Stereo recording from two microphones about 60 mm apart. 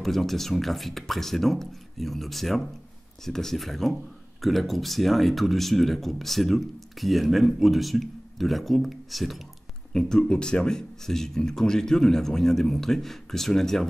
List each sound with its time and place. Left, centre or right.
0.0 s speech: centre